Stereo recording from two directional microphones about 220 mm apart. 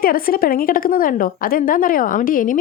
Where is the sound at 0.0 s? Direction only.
40° left (ahead or behind).